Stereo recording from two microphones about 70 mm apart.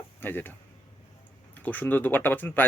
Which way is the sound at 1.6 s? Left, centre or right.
Left.